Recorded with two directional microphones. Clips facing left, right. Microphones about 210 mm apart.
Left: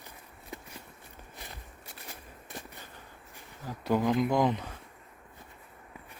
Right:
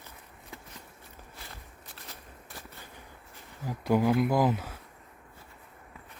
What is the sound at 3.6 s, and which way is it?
Speech, 10° right (ahead or behind).